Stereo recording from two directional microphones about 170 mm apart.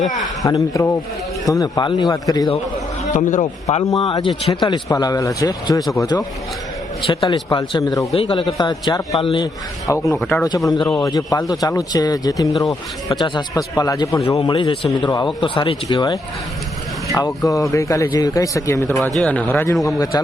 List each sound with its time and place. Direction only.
0.4 s a man's voice: 20° left (ahead or behind)
3.1 s a man's voice: 50° left (ahead or behind); by 9.5 s 30° left (ahead or behind)
9.9 s a man's voice: 20° left (ahead or behind)
10.2 s speech: 10° left (ahead or behind)
10.7 s a man's voice: 20° left (ahead or behind)